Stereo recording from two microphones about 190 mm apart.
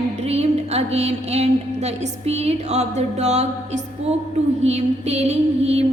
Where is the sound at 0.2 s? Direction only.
35° right (ahead or behind).